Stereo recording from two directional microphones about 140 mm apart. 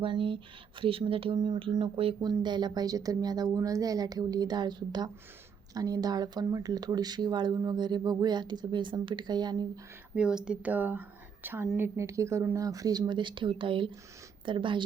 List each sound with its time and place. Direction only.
0.0 s speech: 40° right (ahead or behind)
10.2 s speech: 5° right (ahead or behind); by 14.8 s 35° right (ahead or behind)